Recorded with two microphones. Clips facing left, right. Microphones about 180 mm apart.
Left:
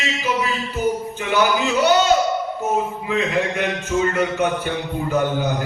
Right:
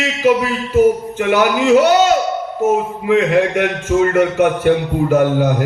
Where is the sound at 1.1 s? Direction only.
80° right.